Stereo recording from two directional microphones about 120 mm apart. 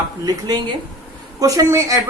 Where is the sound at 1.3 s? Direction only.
30° right (ahead or behind).